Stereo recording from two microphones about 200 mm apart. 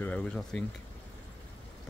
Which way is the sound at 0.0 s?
5° left (ahead or behind).